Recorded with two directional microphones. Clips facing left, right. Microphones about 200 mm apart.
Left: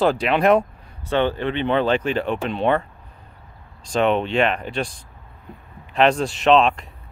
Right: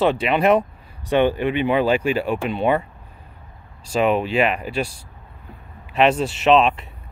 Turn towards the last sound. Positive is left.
turn(degrees=-5)  # may be behind; listen again after turning